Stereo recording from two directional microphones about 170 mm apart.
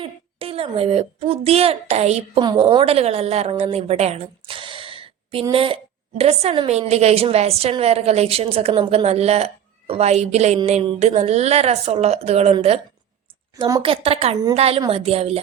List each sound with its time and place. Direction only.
0.0 s a woman's voice: 35° right (ahead or behind)
2.4 s a woman's voice: 25° right (ahead or behind)
13.6 s a woman's voice: 20° right (ahead or behind)
13.8 s a woman's voice: 35° right (ahead or behind)